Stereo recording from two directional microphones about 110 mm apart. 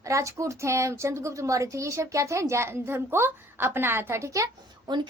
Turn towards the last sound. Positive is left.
turn(degrees=-30)  # may be behind; listen again after turning